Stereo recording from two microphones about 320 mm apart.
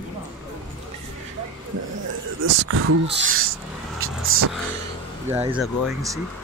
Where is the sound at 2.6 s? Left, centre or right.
Right.